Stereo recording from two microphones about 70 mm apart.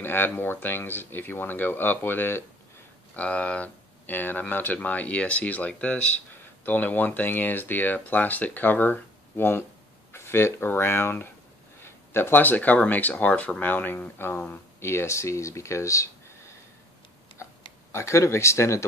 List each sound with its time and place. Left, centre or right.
0.0 s speech: left
3.2 s speech: centre; by 16.5 s left
17.4 s a sound: left
17.9 s speech: left